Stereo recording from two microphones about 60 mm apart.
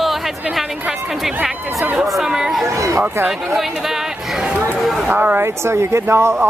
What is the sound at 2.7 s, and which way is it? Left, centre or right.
Speech, right.